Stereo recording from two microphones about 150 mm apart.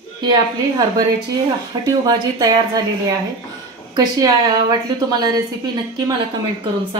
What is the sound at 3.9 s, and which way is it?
A woman's voice, 25° right (ahead or behind).